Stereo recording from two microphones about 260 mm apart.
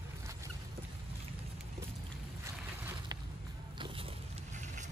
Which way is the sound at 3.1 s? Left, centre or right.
Centre.